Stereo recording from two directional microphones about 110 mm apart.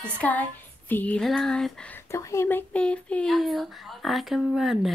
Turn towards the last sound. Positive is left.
turn(degrees=-5)  # may be behind; listen again after turning